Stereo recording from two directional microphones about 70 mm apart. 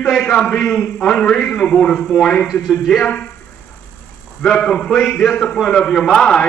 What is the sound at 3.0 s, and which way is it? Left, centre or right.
Speech, centre.